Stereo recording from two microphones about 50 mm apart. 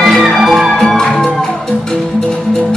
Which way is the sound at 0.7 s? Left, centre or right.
Centre.